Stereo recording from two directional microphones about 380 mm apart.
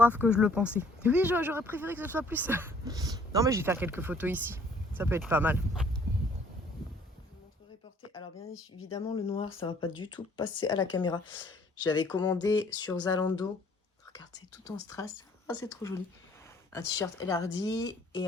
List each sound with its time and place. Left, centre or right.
0.0 s speech: centre
8.9 s speech: centre